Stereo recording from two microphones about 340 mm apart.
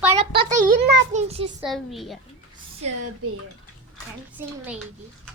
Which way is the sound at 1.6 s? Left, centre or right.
Centre.